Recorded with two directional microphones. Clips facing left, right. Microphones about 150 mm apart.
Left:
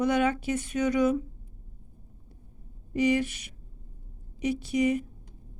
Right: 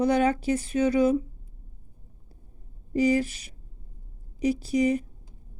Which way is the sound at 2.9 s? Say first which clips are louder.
Right 2 dB; 35° right (ahead or behind).